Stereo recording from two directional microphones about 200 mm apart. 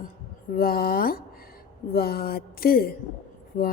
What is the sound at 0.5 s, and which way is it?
A woman's voice, 45° left (ahead or behind).